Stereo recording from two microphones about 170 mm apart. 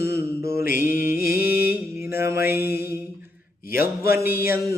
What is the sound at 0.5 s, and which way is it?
Mantra, 60° left (ahead or behind).